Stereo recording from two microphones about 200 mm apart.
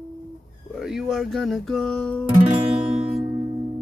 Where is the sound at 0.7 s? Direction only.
Centre (ahead or behind).